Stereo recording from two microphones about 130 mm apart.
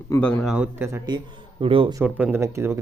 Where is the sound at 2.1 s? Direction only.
15° right (ahead or behind).